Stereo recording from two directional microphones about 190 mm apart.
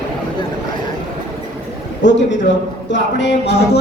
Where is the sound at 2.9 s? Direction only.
65° left (ahead or behind).